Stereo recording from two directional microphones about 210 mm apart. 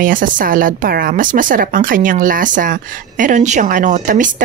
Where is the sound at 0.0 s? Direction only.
40° right (ahead or behind).